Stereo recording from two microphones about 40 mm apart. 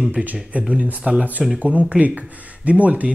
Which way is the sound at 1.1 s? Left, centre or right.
Right.